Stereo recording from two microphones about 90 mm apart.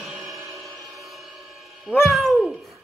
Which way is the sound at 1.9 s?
Centre (ahead or behind).